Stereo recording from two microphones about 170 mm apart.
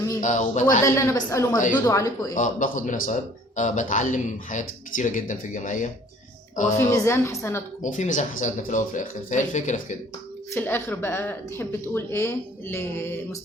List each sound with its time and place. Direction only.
0.2 s a man's voice: 45° left (ahead or behind)
0.9 s speech: 15° left (ahead or behind)
2.3 s a man's voice: 50° left (ahead or behind)
6.7 s speech: 15° left (ahead or behind)
7.8 s a man's voice: 45° left (ahead or behind)
10.5 s speech: 15° left (ahead or behind)